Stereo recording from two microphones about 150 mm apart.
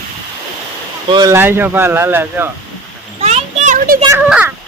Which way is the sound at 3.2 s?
45° right (ahead or behind).